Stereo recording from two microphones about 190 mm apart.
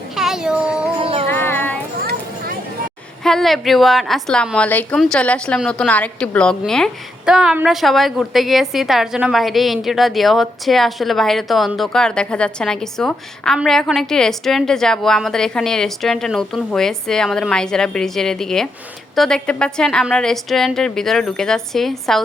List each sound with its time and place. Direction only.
0.2 s a sound: 5° right (ahead or behind)
0.9 s music: 30° right (ahead or behind)
1.3 s child singing: 10° left (ahead or behind)
3.2 s a woman's voice: centre (ahead or behind)